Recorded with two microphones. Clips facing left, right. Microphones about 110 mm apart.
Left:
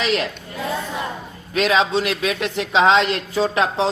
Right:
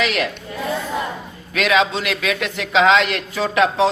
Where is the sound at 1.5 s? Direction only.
35° left (ahead or behind).